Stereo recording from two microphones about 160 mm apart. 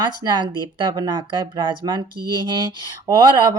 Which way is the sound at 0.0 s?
25° right (ahead or behind).